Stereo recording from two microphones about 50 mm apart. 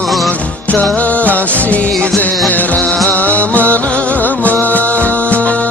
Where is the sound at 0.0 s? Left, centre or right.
Centre.